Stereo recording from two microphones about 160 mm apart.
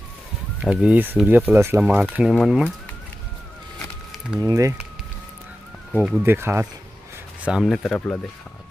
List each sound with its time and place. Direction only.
0.6 s speech: 5° right (ahead or behind)
4.4 s speech: 20° right (ahead or behind)
5.9 s speech: 10° right (ahead or behind)
7.4 s speech: 5° right (ahead or behind)